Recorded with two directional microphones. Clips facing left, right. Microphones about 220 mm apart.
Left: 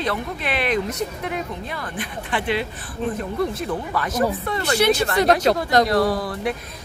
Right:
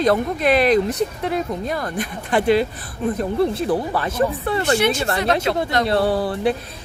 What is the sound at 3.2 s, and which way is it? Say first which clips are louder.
A woman's voice: right 5 dB; 30° right (ahead or behind).